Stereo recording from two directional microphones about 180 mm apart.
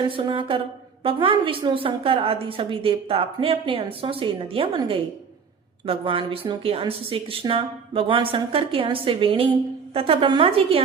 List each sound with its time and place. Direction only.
0.1 s a woman's voice: 25° right (ahead or behind)